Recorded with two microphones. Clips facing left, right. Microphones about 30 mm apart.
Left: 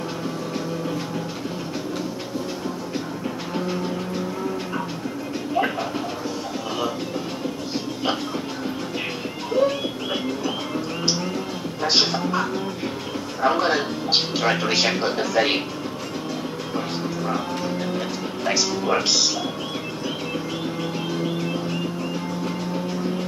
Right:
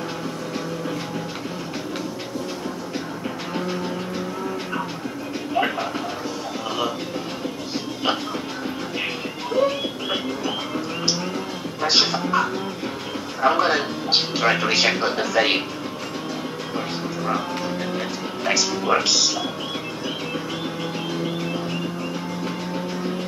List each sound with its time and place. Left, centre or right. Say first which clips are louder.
5.6 s a sound: right 1 dB; right
8.9 s music: right 1 dB; centre
11.8 s music: right 1 dB; centre
16.7 s music: left 1 dB; centre
18.6 s speech: right 1 dB; centre